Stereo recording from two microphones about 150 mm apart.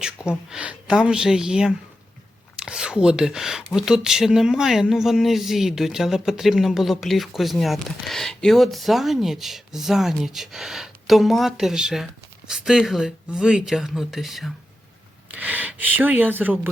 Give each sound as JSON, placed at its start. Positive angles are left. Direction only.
{"t": 0.2, "sound": "speech", "side_deg": 25}
{"t": 0.5, "sound": "speech", "side_deg": -5}